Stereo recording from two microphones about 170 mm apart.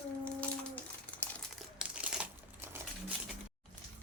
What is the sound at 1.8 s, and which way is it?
Crumpling, 5° right (ahead or behind).